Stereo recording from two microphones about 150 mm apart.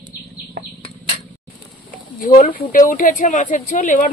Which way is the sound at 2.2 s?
60° left (ahead or behind).